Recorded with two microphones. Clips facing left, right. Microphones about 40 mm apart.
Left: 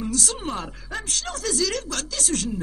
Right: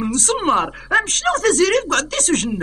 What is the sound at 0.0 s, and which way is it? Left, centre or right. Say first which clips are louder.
A woman's voice: right 8 dB; right.